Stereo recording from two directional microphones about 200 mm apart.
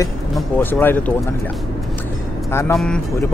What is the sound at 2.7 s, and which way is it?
Speech, 5° left (ahead or behind).